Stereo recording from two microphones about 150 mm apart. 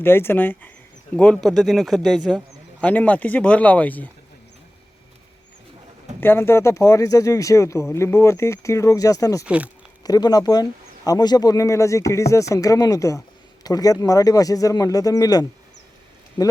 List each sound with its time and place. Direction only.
0.0 s speech: 15° left (ahead or behind)
6.1 s speech: 15° left (ahead or behind)